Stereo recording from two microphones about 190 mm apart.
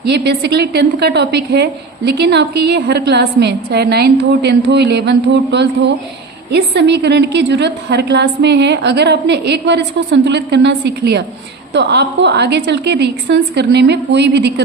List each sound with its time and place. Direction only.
0.0 s a woman's voice: 60° right (ahead or behind)